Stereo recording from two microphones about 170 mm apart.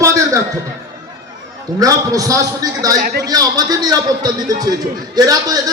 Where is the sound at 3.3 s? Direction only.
20° right (ahead or behind).